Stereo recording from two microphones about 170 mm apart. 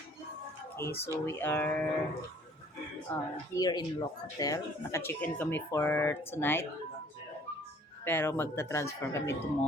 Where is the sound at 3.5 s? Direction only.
25° left (ahead or behind).